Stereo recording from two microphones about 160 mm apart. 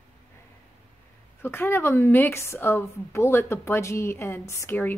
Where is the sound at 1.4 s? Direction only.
15° left (ahead or behind).